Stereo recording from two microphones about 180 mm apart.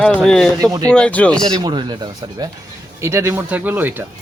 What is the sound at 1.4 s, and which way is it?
Speech, 25° right (ahead or behind).